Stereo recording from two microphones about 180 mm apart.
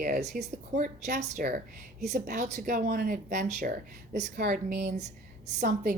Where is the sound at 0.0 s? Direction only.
45° right (ahead or behind).